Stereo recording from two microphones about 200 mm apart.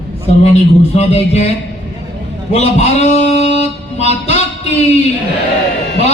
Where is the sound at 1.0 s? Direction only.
35° left (ahead or behind).